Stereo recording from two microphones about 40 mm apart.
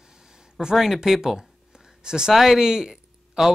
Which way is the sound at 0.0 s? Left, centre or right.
Centre.